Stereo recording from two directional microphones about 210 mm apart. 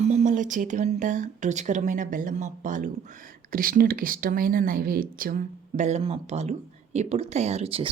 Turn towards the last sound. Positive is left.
turn(degrees=-30)  # may be behind; listen again after turning